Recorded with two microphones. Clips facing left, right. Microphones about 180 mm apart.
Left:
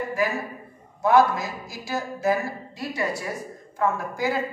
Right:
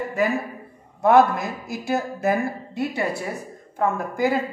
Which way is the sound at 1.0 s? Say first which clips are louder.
Right 3 dB; 60° right (ahead or behind).